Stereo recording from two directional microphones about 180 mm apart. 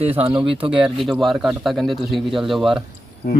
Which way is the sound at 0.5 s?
30° right (ahead or behind).